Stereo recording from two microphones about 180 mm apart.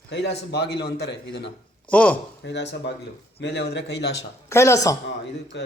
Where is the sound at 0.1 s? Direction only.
70° left (ahead or behind).